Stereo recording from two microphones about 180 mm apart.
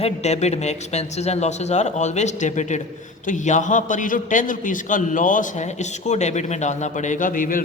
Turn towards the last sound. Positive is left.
turn(degrees=50)  # may be behind; listen again after turning